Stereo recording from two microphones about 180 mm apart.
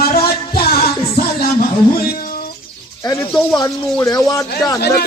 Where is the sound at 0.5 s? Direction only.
60° left (ahead or behind).